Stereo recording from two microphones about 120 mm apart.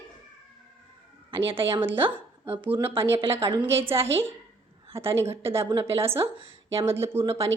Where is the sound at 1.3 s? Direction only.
50° right (ahead or behind).